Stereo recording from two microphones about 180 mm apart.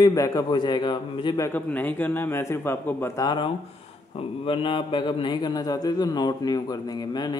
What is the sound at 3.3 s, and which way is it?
A man's voice, 30° left (ahead or behind).